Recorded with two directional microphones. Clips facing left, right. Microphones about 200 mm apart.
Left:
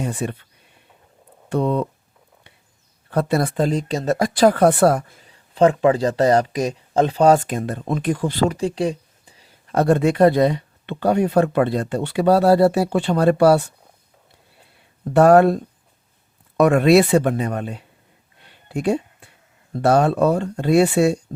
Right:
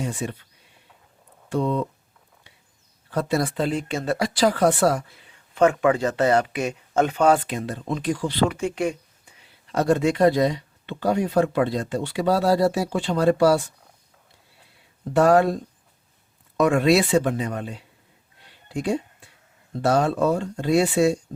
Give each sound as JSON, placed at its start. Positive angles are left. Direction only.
{"t": 0.0, "sound": "speech", "side_deg": 60}
{"t": 1.5, "sound": "speech", "side_deg": 60}
{"t": 3.1, "sound": "speech", "side_deg": 60}
{"t": 9.6, "sound": "speech", "side_deg": 55}
{"t": 15.1, "sound": "speech", "side_deg": 60}
{"t": 18.4, "sound": "a sound", "side_deg": 60}
{"t": 19.7, "sound": "speech", "side_deg": 60}